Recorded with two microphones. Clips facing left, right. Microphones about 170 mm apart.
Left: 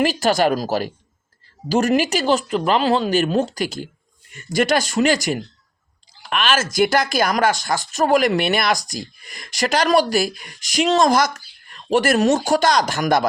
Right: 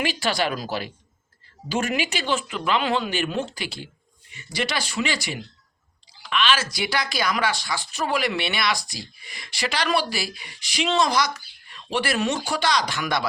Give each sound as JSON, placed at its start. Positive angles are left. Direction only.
{"t": 0.0, "sound": "speech", "side_deg": 40}